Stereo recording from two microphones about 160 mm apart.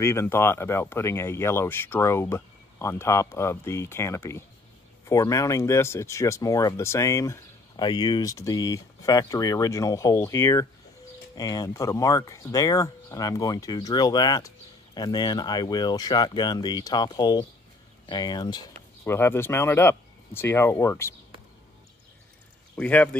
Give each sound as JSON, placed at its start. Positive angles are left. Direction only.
{"t": 0.0, "sound": "speech", "side_deg": 15}
{"t": 19.0, "sound": "speech", "side_deg": 15}
{"t": 22.8, "sound": "speech", "side_deg": 10}